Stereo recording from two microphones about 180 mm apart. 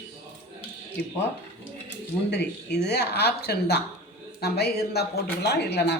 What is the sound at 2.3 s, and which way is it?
Speech, 70° left (ahead or behind).